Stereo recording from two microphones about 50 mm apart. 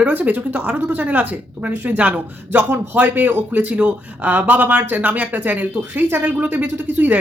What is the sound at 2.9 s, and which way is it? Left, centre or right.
Speech, right.